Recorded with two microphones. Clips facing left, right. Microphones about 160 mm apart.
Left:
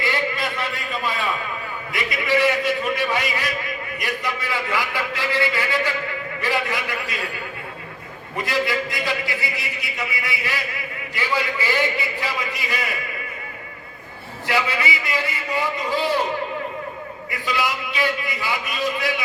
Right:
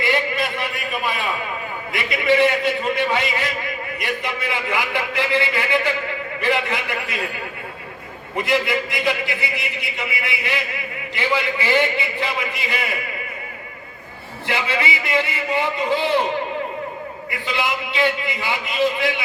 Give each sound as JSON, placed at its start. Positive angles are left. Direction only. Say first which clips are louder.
{"t": 0.0, "sound": "a sound", "louder": "right 3 dB", "side_deg": -20}
{"t": 1.9, "sound": "a man's voice", "louder": "right 3 dB", "side_deg": -25}
{"t": 8.4, "sound": "a man's voice", "louder": "right 3 dB", "side_deg": -20}
{"t": 14.4, "sound": "a man's voice", "louder": "even", "side_deg": -25}
{"t": 17.4, "sound": "a man's voice", "louder": "even", "side_deg": -25}